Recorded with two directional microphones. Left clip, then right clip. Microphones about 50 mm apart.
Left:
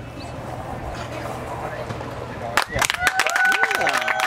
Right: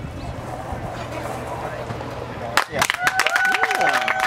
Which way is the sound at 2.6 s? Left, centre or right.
Right.